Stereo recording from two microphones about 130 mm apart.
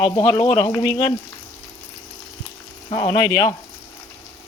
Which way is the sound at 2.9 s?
40° left (ahead or behind).